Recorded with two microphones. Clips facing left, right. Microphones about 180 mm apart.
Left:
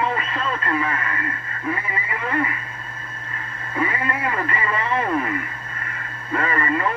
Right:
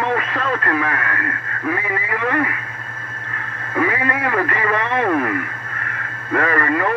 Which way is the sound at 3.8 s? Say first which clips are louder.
Right 4 dB; 60° right (ahead or behind).